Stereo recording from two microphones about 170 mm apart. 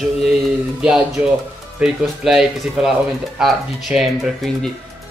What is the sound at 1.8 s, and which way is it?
Speech, centre (ahead or behind).